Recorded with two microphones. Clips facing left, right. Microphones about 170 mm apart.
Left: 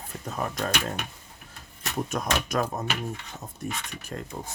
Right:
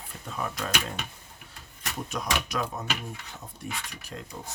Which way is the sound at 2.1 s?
45° left (ahead or behind).